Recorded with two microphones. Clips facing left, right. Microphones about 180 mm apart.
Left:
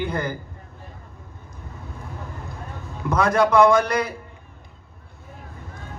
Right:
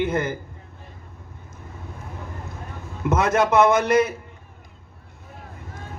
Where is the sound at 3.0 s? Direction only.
25° right (ahead or behind).